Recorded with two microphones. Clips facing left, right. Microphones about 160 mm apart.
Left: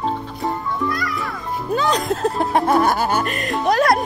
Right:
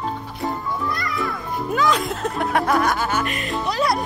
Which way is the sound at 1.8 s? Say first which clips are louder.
Left 1 dB; 35° left (ahead or behind).